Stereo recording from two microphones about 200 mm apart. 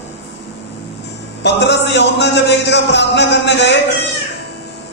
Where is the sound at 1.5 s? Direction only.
60° left (ahead or behind).